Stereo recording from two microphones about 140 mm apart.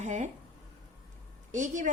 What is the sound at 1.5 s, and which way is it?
Speech, 65° right (ahead or behind).